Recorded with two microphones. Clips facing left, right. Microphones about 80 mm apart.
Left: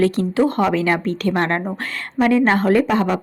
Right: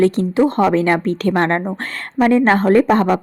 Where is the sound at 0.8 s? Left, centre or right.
Right.